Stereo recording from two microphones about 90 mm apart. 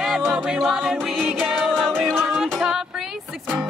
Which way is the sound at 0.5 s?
Centre (ahead or behind).